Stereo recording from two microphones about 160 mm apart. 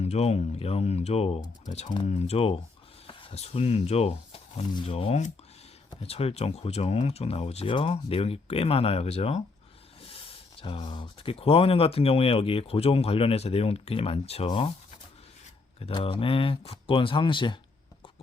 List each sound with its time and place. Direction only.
0.0 s speech: 40° left (ahead or behind)
15.8 s speech: 35° left (ahead or behind)